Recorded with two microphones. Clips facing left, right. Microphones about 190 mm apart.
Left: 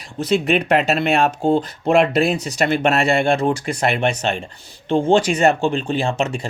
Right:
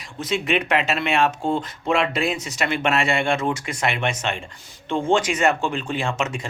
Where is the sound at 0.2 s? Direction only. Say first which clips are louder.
Left 5 dB; 35° left (ahead or behind).